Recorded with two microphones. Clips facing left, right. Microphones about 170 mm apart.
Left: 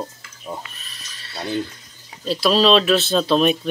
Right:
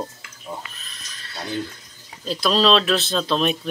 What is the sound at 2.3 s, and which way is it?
Speech, 5° left (ahead or behind).